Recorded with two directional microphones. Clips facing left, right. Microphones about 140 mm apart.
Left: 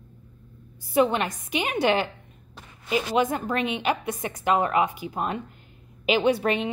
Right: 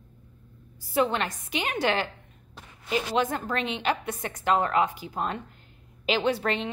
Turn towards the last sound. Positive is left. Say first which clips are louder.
# left 4 dB
turn(degrees=15)  # may be behind; listen again after turning